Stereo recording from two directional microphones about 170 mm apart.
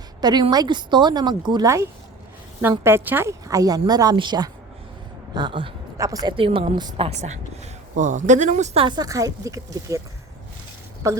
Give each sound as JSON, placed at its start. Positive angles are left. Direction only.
{"t": 0.2, "sound": "a woman's voice", "side_deg": -25}
{"t": 11.0, "sound": "a woman's voice", "side_deg": -15}